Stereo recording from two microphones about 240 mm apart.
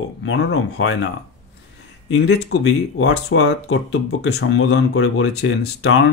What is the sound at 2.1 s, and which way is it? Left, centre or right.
Speech, left.